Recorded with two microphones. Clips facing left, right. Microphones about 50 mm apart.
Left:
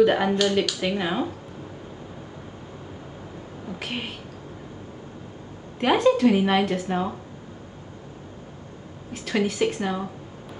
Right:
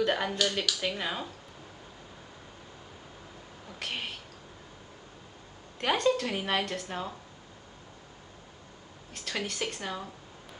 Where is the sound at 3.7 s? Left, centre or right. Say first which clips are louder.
Left 4 dB; centre.